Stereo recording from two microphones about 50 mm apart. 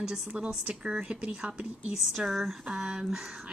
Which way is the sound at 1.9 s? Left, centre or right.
Centre.